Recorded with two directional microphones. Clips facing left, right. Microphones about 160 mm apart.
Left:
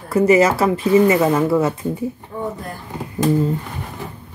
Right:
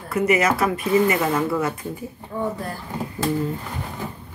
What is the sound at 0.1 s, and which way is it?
Speech, 30° left (ahead or behind).